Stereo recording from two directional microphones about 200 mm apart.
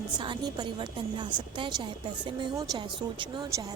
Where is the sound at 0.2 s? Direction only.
20° right (ahead or behind).